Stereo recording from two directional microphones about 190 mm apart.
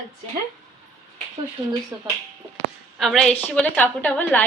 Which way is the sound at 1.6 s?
25° right (ahead or behind).